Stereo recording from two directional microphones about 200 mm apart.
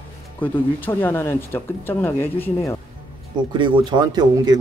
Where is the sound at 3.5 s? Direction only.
25° right (ahead or behind).